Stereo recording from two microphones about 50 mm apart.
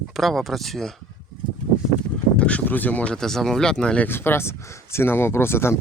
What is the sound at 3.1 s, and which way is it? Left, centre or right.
Speech, centre.